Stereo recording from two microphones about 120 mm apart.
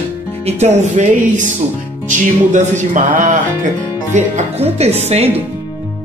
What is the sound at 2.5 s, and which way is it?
Speech, 90° right.